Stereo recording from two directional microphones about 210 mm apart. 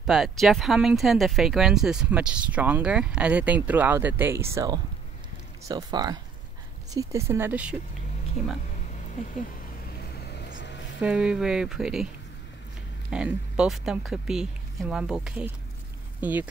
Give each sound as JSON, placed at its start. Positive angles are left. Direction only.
{"t": 0.0, "sound": "speech", "side_deg": 0}
{"t": 10.2, "sound": "vehicle", "side_deg": 55}
{"t": 11.0, "sound": "speech", "side_deg": -5}
{"t": 13.1, "sound": "speech", "side_deg": -5}